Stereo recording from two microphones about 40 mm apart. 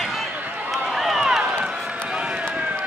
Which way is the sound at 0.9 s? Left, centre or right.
Centre.